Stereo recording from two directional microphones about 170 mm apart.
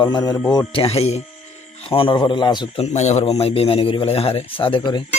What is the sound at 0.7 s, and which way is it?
A man's voice, 35° left (ahead or behind).